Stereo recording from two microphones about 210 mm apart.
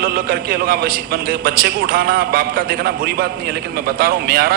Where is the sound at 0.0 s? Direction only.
45° right (ahead or behind).